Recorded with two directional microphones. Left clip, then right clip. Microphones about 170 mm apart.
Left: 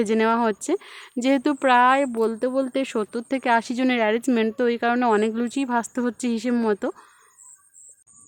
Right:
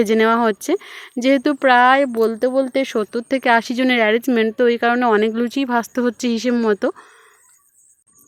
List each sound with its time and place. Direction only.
0.0 s speech: 25° right (ahead or behind)